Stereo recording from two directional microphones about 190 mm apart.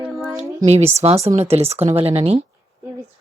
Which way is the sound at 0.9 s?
30° right (ahead or behind).